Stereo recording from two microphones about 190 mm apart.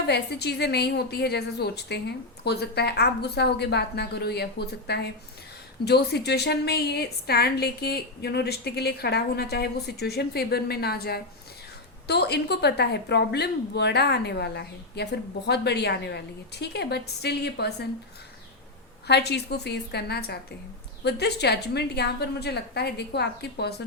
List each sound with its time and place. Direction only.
0.1 s a woman's voice: 60° left (ahead or behind)
19.0 s a woman's voice: 60° left (ahead or behind)